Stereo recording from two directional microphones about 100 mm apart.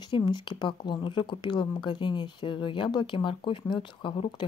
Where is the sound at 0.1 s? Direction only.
50° left (ahead or behind).